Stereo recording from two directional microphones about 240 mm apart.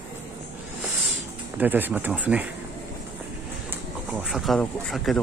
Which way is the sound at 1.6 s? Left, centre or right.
Centre.